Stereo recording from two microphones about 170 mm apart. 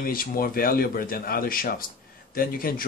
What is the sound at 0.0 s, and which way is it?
Speech, 60° left (ahead or behind).